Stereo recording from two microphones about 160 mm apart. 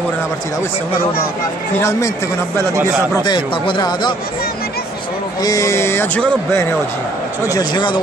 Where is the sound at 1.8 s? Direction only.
20° left (ahead or behind).